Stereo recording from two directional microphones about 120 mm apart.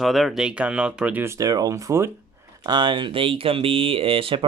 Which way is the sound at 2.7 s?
40° right (ahead or behind).